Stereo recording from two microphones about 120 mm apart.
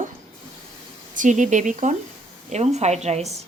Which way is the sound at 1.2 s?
90° right.